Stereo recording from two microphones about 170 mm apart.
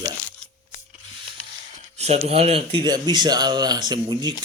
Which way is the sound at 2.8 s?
25° right (ahead or behind).